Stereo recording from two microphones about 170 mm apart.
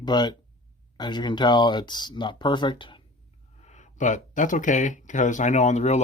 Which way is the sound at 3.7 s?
45° left (ahead or behind).